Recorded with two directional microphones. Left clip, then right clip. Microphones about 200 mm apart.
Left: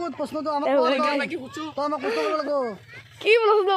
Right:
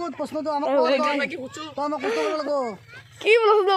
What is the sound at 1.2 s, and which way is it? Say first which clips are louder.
Speech: right 1 dB; 35° left (ahead or behind).